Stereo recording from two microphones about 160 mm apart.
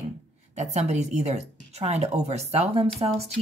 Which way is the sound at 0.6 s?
45° right (ahead or behind).